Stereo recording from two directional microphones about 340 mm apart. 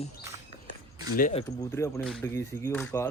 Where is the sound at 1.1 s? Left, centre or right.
Left.